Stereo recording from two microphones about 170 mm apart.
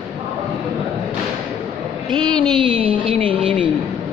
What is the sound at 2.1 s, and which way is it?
Speech, 25° right (ahead or behind).